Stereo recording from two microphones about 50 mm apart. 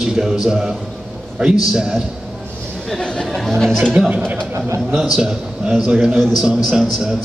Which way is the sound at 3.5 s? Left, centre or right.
Centre.